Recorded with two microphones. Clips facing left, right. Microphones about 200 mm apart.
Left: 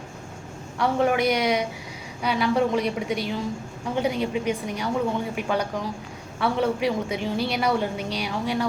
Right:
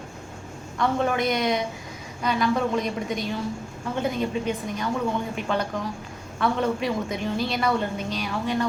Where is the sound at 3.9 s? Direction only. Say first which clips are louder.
Left 1 dB; 10° left (ahead or behind).